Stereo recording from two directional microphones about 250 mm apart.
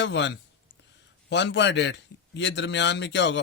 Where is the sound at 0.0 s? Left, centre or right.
Left.